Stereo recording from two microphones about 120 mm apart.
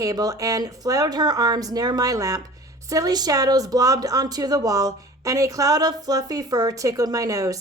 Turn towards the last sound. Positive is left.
turn(degrees=-30)  # may be behind; listen again after turning